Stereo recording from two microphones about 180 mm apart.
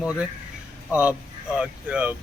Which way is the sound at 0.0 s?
5° right (ahead or behind).